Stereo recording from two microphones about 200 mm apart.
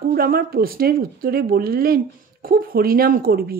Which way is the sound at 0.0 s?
45° right (ahead or behind).